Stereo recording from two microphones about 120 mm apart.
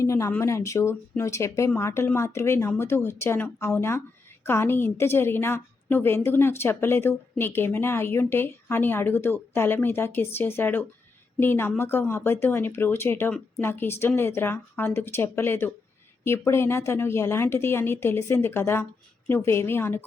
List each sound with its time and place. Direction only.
0.0 s a woman's voice: 25° left (ahead or behind)